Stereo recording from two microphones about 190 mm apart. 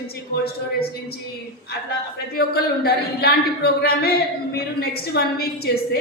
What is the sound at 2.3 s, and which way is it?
A woman's voice, 55° left (ahead or behind).